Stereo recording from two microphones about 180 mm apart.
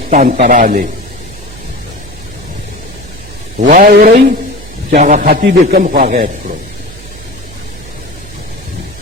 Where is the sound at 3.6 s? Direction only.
55° right (ahead or behind).